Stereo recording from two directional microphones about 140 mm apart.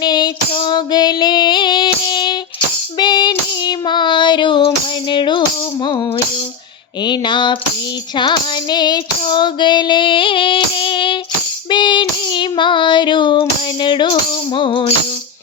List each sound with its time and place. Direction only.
0.0 s female singing: 30° left (ahead or behind)
5.1 s music: 35° left (ahead or behind)
7.0 s a sound: 35° left (ahead or behind)
8.2 s female singing: 30° left (ahead or behind)